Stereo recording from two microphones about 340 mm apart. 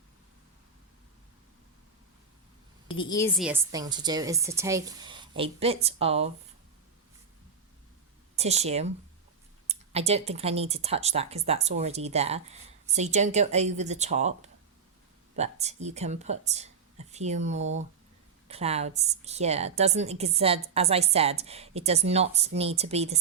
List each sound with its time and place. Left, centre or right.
3.0 s a woman's voice: centre
8.4 s a woman's voice: centre